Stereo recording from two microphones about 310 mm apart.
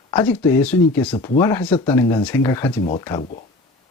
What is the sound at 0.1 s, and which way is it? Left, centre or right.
Speech, centre.